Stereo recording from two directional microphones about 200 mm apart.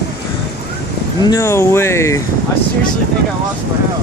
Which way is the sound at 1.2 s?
15° left (ahead or behind).